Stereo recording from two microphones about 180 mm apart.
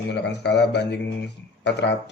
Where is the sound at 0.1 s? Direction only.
70° left (ahead or behind).